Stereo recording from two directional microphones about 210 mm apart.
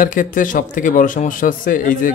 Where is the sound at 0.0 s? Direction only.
40° left (ahead or behind).